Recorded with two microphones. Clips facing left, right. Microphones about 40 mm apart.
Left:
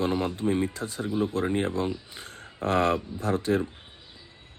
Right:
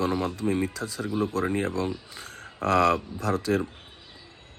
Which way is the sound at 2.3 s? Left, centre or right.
Right.